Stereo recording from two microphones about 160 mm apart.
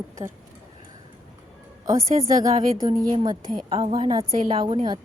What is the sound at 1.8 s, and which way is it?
Speech, 20° right (ahead or behind).